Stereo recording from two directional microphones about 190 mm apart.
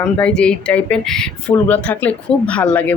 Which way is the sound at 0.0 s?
5° left (ahead or behind).